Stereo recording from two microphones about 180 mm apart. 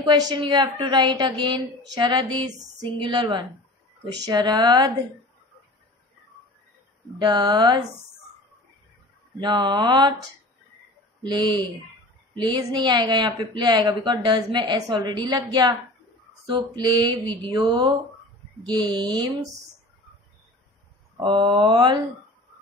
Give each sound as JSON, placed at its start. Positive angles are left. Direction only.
{"t": 0.0, "sound": "a woman's voice", "side_deg": -25}
{"t": 7.2, "sound": "a woman's voice", "side_deg": -25}
{"t": 9.4, "sound": "a woman's voice", "side_deg": -25}
{"t": 11.2, "sound": "a woman's voice", "side_deg": -25}
{"t": 21.2, "sound": "a woman's voice", "side_deg": -25}